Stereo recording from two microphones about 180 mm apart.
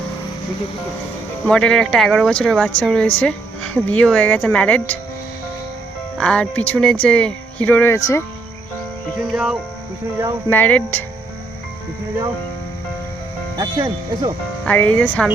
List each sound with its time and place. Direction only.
1.5 s speech: 5° left (ahead or behind)
6.1 s speech: 5° left (ahead or behind)
9.1 s music: 5° right (ahead or behind)
10.5 s speech: 10° left (ahead or behind)
13.6 s speech: 20° right (ahead or behind)
14.6 s speech: 10° left (ahead or behind)